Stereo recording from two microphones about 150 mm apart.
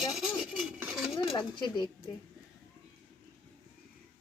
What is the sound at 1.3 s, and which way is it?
Speech, 30° left (ahead or behind).